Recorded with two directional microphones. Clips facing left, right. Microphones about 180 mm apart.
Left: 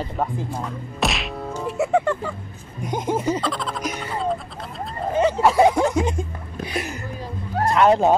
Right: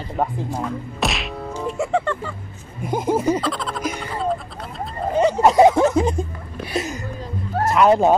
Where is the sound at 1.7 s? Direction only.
10° left (ahead or behind).